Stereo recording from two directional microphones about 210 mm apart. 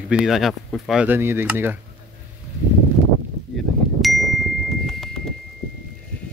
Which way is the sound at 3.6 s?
Centre (ahead or behind).